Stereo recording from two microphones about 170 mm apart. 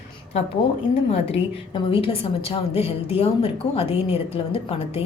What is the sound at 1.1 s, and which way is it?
A woman's voice, 35° left (ahead or behind).